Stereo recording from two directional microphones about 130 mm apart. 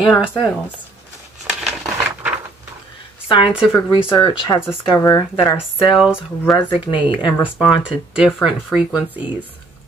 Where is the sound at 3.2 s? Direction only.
40° left (ahead or behind).